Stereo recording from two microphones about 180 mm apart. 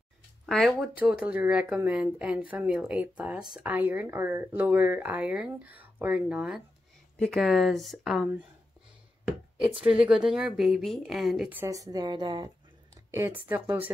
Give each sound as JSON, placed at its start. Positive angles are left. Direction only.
{"t": 0.5, "sound": "a woman's voice", "side_deg": 0}
{"t": 9.8, "sound": "a woman's voice", "side_deg": -5}
{"t": 11.9, "sound": "speech", "side_deg": -20}
{"t": 13.1, "sound": "speech", "side_deg": -10}